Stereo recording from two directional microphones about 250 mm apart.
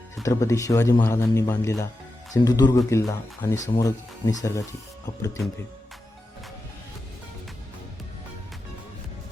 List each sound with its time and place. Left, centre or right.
0.2 s speech: centre